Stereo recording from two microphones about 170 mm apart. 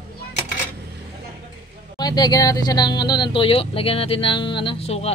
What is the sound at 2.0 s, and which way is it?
Speech, 25° left (ahead or behind).